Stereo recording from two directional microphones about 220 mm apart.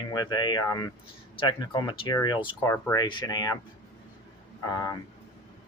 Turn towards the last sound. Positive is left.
turn(degrees=15)  # may be behind; listen again after turning